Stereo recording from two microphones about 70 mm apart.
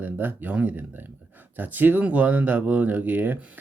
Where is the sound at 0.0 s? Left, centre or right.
Right.